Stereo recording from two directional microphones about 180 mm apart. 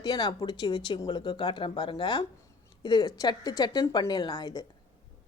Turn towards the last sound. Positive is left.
turn(degrees=20)  # may be behind; listen again after turning